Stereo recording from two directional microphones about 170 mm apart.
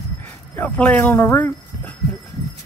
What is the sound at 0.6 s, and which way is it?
Speech, 10° left (ahead or behind).